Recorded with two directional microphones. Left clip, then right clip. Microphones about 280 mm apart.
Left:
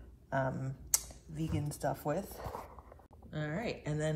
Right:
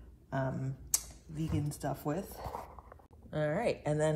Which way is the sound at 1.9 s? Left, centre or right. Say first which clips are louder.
Left 1 dB; centre.